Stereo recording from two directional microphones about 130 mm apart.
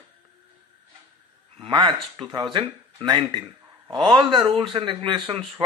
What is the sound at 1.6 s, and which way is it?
Speech, 40° right (ahead or behind).